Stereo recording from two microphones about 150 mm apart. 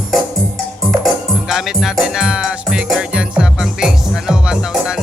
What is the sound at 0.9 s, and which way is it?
Music, centre (ahead or behind).